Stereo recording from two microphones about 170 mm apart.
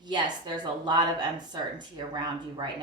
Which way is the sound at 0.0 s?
25° right (ahead or behind).